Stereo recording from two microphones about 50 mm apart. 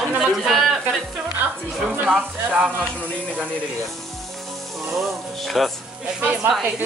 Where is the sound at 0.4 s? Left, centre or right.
Centre.